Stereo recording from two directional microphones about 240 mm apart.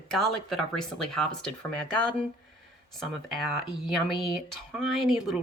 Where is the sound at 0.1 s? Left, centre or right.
Centre.